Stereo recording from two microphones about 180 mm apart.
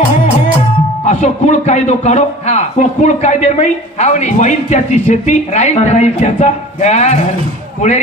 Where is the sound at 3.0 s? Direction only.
40° left (ahead or behind).